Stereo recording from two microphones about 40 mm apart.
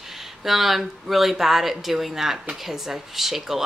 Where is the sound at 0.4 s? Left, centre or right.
Centre.